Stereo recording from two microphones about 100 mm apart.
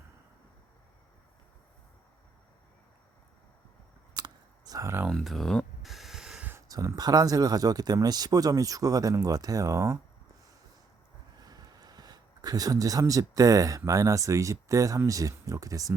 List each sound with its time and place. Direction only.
4.1 s clicking: 40° right (ahead or behind)
5.1 s a sound: centre (ahead or behind)
6.7 s speech: 35° right (ahead or behind)
11.3 s speech: 40° right (ahead or behind)